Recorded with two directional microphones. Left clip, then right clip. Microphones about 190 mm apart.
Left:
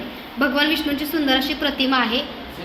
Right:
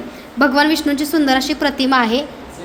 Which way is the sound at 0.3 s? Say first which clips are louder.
Right 5 dB; 75° right (ahead or behind).